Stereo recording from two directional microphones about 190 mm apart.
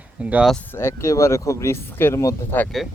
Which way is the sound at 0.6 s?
10° left (ahead or behind).